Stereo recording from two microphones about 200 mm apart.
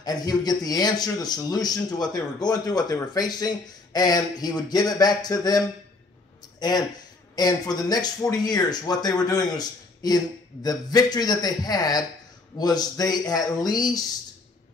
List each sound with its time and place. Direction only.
0.0 s speech: 20° left (ahead or behind)
7.3 s speech: 20° left (ahead or behind)